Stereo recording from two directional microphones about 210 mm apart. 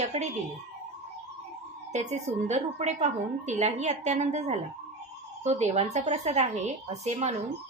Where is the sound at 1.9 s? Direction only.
35° right (ahead or behind).